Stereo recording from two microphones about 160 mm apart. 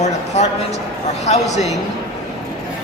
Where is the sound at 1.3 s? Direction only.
45° left (ahead or behind).